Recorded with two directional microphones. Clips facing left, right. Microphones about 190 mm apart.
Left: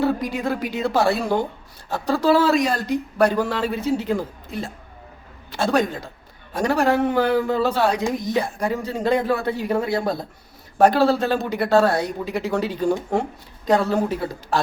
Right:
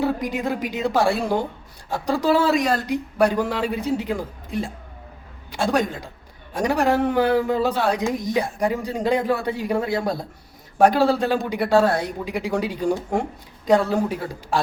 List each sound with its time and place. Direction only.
0.0 s a man's voice: 15° right (ahead or behind)